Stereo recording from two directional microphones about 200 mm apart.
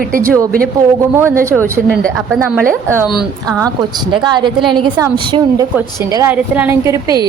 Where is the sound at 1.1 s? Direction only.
10° right (ahead or behind).